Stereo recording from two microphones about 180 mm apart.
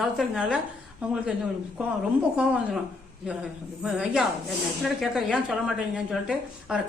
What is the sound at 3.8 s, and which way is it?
A woman's voice, 5° right (ahead or behind).